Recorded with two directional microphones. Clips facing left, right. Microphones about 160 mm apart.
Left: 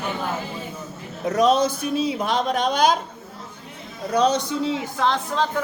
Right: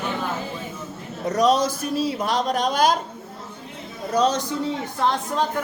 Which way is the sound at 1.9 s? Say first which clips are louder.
Right 1 dB; centre (ahead or behind).